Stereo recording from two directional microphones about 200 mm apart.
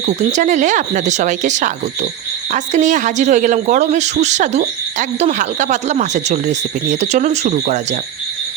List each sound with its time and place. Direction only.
0.0 s speech: 35° right (ahead or behind)